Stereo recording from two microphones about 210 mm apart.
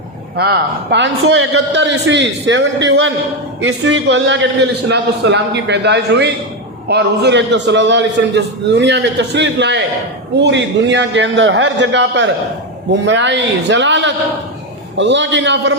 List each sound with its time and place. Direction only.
0.3 s a man's voice: 50° right (ahead or behind)